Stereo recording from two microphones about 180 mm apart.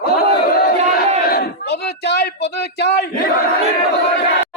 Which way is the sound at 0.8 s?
35° right (ahead or behind).